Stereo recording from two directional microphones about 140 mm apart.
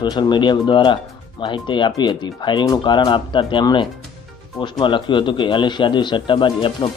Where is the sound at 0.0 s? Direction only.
35° left (ahead or behind).